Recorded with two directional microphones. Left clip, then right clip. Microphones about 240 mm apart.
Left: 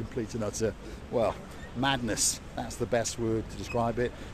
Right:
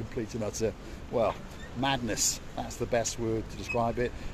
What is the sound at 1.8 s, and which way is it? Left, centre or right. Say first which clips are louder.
Speech: left 1 dB; centre.